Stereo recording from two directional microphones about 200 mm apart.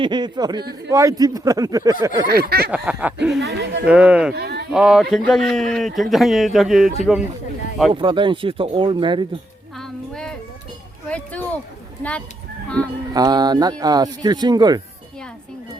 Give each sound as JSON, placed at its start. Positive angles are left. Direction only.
{"t": 0.0, "sound": "speech", "side_deg": -20}
{"t": 2.2, "sound": "a sound", "side_deg": -50}
{"t": 2.6, "sound": "speech", "side_deg": -5}
{"t": 3.4, "sound": "speech", "side_deg": -55}
{"t": 3.8, "sound": "speech", "side_deg": -5}
{"t": 4.4, "sound": "a sound", "side_deg": -55}
{"t": 4.7, "sound": "speech", "side_deg": 0}
{"t": 7.9, "sound": "speech", "side_deg": -25}
{"t": 9.7, "sound": "music", "side_deg": 0}
{"t": 11.1, "sound": "a sound", "side_deg": 5}
{"t": 12.6, "sound": "speech", "side_deg": 5}
{"t": 13.1, "sound": "speech", "side_deg": -20}